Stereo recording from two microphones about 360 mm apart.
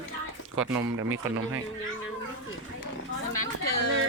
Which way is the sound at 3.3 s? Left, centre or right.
Left.